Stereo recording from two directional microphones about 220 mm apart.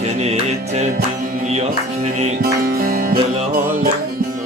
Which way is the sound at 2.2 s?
40° right (ahead or behind).